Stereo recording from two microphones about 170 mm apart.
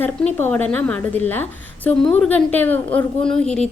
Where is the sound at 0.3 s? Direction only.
10° left (ahead or behind).